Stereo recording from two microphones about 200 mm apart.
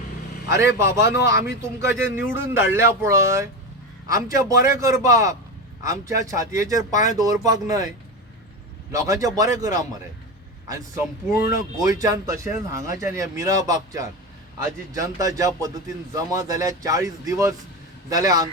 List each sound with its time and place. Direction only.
0.4 s speech: 15° right (ahead or behind)
8.9 s a man's voice: 15° right (ahead or behind)